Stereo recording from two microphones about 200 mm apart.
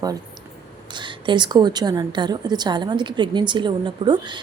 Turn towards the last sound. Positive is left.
turn(degrees=-25)  # may be behind; listen again after turning